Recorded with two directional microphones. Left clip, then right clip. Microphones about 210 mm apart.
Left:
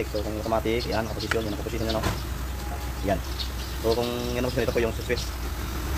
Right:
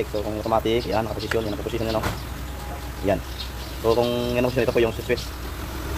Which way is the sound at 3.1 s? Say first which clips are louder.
Right 4 dB; 40° right (ahead or behind).